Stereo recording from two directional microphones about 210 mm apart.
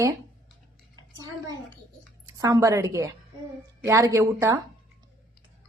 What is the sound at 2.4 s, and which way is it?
A woman's voice, 15° right (ahead or behind).